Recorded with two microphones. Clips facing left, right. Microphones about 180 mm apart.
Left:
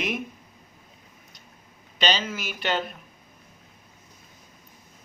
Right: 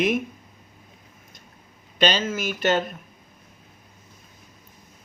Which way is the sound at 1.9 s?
50° right (ahead or behind).